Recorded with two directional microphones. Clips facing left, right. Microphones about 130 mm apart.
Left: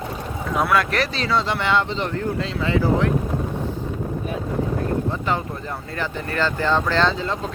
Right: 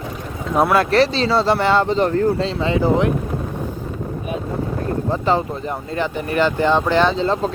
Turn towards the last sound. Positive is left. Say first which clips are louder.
# right 7 dB
turn(degrees=-35)  # may be behind; listen again after turning